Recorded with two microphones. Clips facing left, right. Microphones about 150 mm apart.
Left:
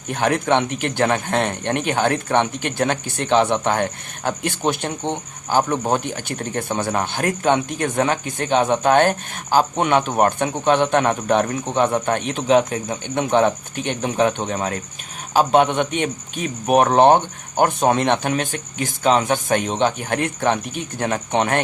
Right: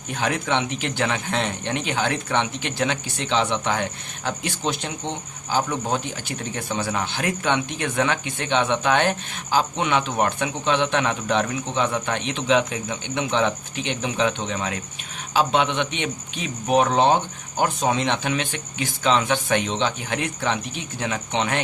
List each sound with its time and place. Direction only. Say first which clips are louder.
0.1 s a man's voice: left 5 dB; 55° left (ahead or behind)